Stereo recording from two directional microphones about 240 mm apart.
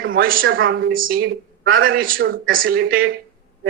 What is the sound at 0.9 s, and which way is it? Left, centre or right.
Speech, right.